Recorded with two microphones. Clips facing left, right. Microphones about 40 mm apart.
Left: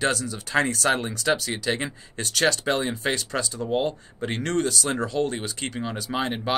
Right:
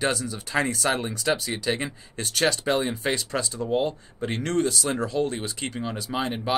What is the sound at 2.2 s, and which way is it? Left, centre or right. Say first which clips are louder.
Speech: left 1 dB; centre.